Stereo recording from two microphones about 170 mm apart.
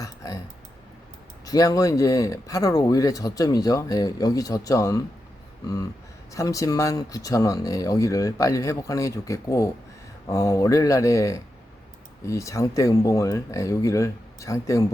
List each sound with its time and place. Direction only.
0.0 s typing: 20° left (ahead or behind)
1.5 s speech: 20° left (ahead or behind)
6.3 s speech: 20° left (ahead or behind)